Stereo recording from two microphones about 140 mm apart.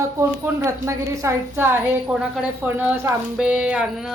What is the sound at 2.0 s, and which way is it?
Speech, 5° right (ahead or behind).